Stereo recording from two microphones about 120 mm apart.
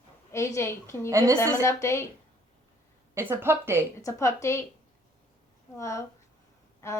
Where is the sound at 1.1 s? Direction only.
25° right (ahead or behind).